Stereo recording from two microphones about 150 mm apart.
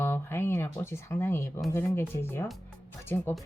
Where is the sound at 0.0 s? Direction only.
15° left (ahead or behind).